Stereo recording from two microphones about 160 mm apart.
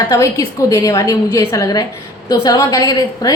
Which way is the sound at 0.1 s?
20° left (ahead or behind).